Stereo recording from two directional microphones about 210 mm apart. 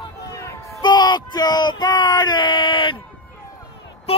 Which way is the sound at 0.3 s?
15° left (ahead or behind).